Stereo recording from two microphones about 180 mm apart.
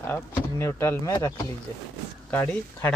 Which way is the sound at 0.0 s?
15° left (ahead or behind).